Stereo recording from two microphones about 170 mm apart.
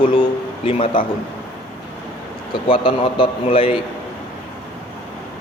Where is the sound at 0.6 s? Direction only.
35° left (ahead or behind).